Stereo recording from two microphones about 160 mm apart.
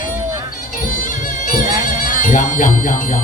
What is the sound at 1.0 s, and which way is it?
Music, 55° left (ahead or behind).